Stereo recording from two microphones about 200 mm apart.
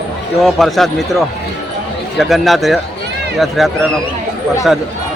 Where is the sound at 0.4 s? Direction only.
Centre (ahead or behind).